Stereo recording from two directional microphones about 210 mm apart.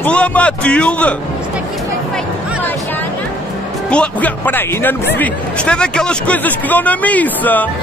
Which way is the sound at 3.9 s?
5° left (ahead or behind).